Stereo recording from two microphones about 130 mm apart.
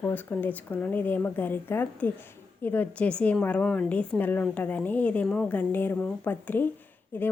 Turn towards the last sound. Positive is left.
turn(degrees=15)  # may be behind; listen again after turning